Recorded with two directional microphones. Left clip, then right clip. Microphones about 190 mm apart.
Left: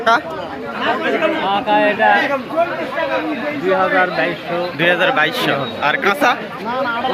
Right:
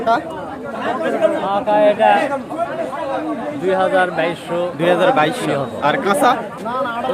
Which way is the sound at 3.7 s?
30° right (ahead or behind).